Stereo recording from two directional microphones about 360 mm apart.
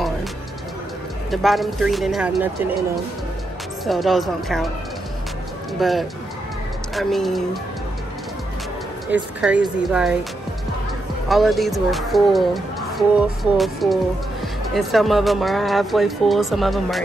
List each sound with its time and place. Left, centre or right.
1.3 s speech: centre
3.8 s speech: centre
5.8 s speech: centre
9.1 s speech: centre
11.2 s speech: centre